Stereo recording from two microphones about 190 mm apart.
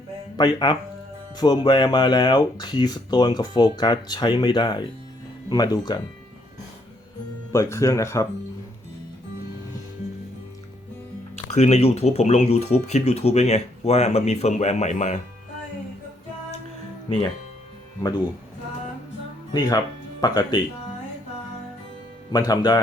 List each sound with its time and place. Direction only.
0.3 s speech: 20° left (ahead or behind)
7.5 s speech: 15° left (ahead or behind)
11.5 s speech: 35° left (ahead or behind)
19.5 s speech: 20° left (ahead or behind)
22.3 s speech: 20° left (ahead or behind)